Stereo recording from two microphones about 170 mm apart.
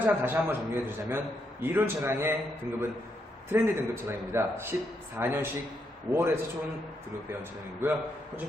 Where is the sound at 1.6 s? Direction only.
15° right (ahead or behind).